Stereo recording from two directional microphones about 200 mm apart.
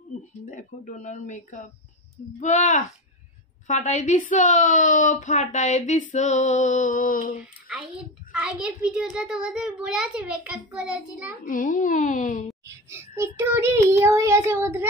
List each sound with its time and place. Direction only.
0.5 s a woman's voice: 40° left (ahead or behind)
7.6 s a child's voice: centre (ahead or behind)
11.4 s a woman's voice: 40° left (ahead or behind)
12.6 s child singing: 10° right (ahead or behind)